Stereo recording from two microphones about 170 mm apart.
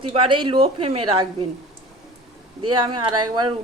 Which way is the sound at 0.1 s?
30° right (ahead or behind).